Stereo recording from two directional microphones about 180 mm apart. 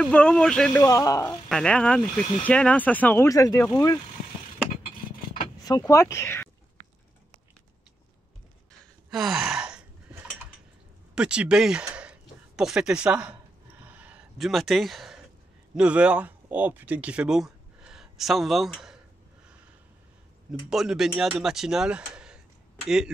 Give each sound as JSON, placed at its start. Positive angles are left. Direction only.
{"t": 0.0, "sound": "speech", "side_deg": 5}
{"t": 1.5, "sound": "speech", "side_deg": 5}
{"t": 5.6, "sound": "speech", "side_deg": 20}
{"t": 9.1, "sound": "gasp", "side_deg": -5}
{"t": 11.1, "sound": "speech", "side_deg": -5}
{"t": 11.9, "sound": "a sound", "side_deg": -5}
{"t": 15.7, "sound": "speech", "side_deg": -5}
{"t": 20.7, "sound": "speech", "side_deg": 0}